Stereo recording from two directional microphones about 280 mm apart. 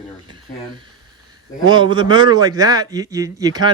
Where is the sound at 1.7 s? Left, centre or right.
Centre.